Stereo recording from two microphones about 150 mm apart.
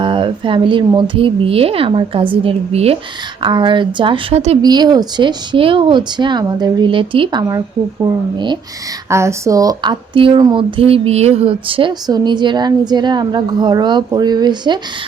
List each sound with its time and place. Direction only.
0.0 s speech: 35° right (ahead or behind)
9.0 s speech: 20° right (ahead or behind)